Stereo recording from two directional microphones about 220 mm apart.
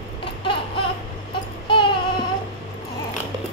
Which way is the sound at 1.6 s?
20° left (ahead or behind).